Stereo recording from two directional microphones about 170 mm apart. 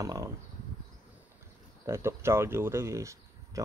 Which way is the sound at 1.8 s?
15° right (ahead or behind).